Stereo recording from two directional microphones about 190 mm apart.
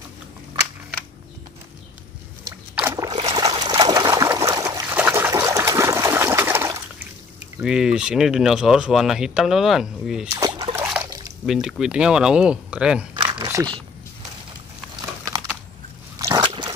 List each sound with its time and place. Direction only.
2.7 s boat: 10° right (ahead or behind)
3.6 s water: 20° right (ahead or behind)
7.6 s speech: 5° right (ahead or behind)
10.3 s a sound: 20° right (ahead or behind)
11.4 s speech: centre (ahead or behind)
13.2 s speech: 20° right (ahead or behind)
16.2 s dog: 20° right (ahead or behind)